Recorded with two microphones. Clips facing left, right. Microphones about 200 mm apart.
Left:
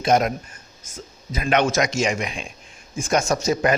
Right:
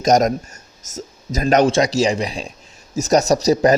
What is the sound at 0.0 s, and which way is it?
Speech, 40° right (ahead or behind).